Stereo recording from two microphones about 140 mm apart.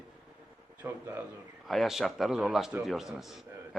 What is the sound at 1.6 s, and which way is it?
A man's voice, centre (ahead or behind).